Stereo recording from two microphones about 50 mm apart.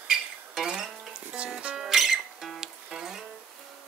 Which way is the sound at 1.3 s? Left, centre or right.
Right.